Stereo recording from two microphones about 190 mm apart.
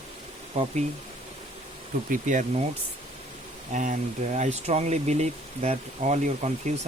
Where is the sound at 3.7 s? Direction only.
40° right (ahead or behind).